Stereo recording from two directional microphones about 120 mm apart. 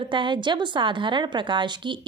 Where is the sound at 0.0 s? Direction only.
40° right (ahead or behind).